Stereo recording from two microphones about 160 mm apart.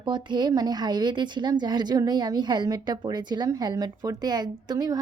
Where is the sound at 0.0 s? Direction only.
30° right (ahead or behind).